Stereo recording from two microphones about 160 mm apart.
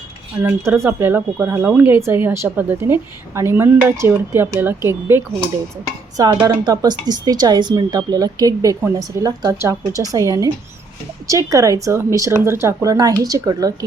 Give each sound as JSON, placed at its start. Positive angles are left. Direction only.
{"t": 0.4, "sound": "speech", "side_deg": -15}